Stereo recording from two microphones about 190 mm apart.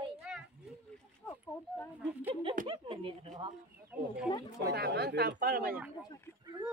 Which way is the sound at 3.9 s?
10° right (ahead or behind).